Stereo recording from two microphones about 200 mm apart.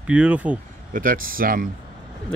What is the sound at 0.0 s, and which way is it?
Speech, 5° right (ahead or behind).